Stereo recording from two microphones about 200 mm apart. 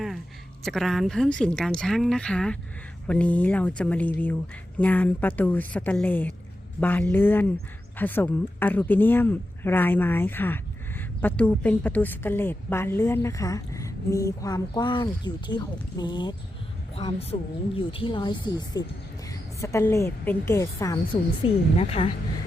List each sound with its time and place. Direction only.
0.6 s speech: centre (ahead or behind); by 22.1 s 30° left (ahead or behind)